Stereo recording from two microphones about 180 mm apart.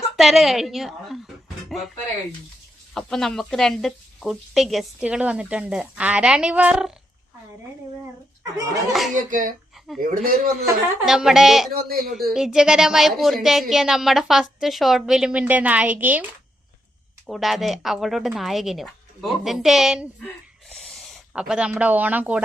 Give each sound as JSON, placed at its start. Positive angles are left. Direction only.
{"t": 0.2, "sound": "speech", "side_deg": 0}
{"t": 2.9, "sound": "speech", "side_deg": 5}
{"t": 8.5, "sound": "speech", "side_deg": -20}
{"t": 8.9, "sound": "speech", "side_deg": 0}
{"t": 9.1, "sound": "speech", "side_deg": -45}
{"t": 9.7, "sound": "a sound", "side_deg": 0}
{"t": 10.0, "sound": "speech", "side_deg": -50}
{"t": 11.0, "sound": "speech", "side_deg": 0}
{"t": 11.7, "sound": "a man's voice", "side_deg": -55}
{"t": 12.3, "sound": "speech", "side_deg": -5}
{"t": 17.2, "sound": "speech", "side_deg": 0}